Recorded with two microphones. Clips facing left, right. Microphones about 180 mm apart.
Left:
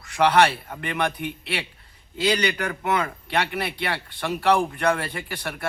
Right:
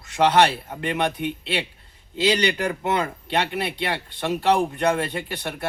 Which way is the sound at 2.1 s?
25° right (ahead or behind).